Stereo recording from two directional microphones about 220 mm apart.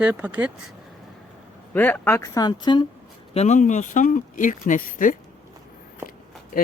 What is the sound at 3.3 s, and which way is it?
Speech, 30° left (ahead or behind).